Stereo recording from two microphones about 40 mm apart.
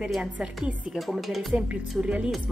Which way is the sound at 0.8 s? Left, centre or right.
Centre.